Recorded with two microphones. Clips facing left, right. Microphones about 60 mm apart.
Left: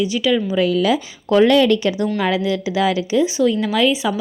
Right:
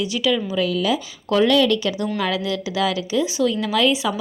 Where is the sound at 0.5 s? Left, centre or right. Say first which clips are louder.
Left 4 dB; left.